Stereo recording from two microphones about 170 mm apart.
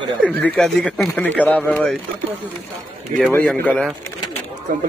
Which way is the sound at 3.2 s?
10° left (ahead or behind).